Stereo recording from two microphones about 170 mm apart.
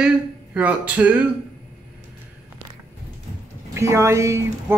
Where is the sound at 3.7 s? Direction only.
15° right (ahead or behind).